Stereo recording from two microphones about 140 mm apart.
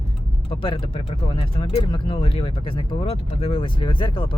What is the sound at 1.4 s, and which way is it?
Speech, 40° left (ahead or behind).